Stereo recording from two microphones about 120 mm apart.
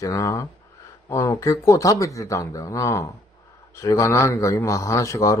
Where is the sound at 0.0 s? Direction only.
25° left (ahead or behind).